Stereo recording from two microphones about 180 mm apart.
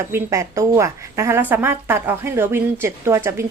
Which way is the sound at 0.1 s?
15° right (ahead or behind).